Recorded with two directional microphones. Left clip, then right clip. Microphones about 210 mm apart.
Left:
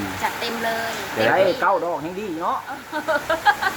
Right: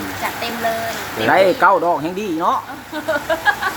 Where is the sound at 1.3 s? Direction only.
30° right (ahead or behind).